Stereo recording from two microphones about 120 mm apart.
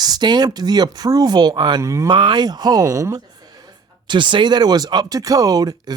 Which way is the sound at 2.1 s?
40° right (ahead or behind).